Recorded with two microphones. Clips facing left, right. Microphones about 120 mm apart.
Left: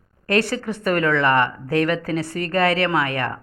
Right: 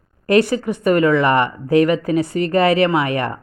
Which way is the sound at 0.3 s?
15° right (ahead or behind).